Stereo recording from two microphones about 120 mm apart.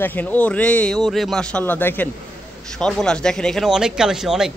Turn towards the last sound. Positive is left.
turn(degrees=-5)  # may be behind; listen again after turning